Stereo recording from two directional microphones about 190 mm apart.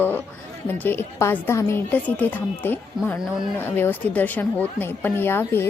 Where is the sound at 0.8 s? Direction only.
10° left (ahead or behind).